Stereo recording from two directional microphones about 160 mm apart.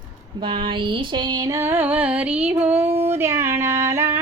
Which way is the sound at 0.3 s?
30° right (ahead or behind).